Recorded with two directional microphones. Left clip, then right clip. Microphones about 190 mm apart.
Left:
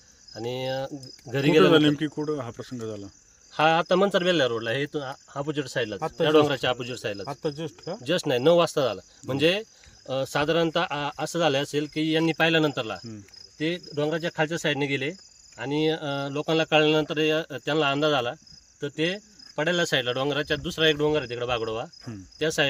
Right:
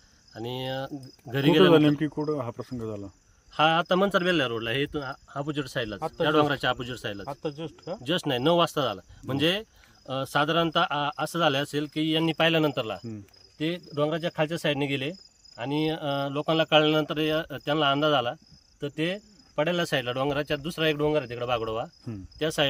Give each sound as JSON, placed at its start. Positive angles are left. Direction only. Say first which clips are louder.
{"t": 0.3, "sound": "speech", "louder": "left 3 dB", "side_deg": -5}
{"t": 1.7, "sound": "speech", "louder": "even", "side_deg": -40}
{"t": 3.5, "sound": "speech", "louder": "left 1 dB", "side_deg": 0}
{"t": 4.9, "sound": "speech", "louder": "left 1 dB", "side_deg": -35}
{"t": 5.3, "sound": "speech", "louder": "left 3 dB", "side_deg": -10}
{"t": 6.0, "sound": "speech", "louder": "left 2 dB", "side_deg": 45}
{"t": 6.2, "sound": "speech", "louder": "left 3 dB", "side_deg": -5}
{"t": 7.3, "sound": "speech", "louder": "left 3 dB", "side_deg": 50}
{"t": 8.0, "sound": "speech", "louder": "left 4 dB", "side_deg": -5}